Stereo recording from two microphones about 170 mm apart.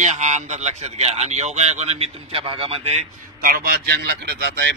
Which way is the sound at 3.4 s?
60° right (ahead or behind).